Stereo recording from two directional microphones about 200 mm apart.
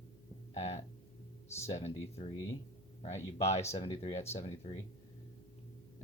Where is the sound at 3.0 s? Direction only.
35° left (ahead or behind).